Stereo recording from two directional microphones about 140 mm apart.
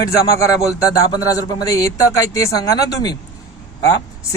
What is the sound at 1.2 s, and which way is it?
A man's voice, 25° left (ahead or behind).